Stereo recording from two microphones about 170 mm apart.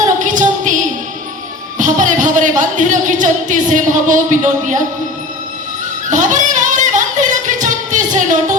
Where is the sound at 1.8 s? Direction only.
50° right (ahead or behind).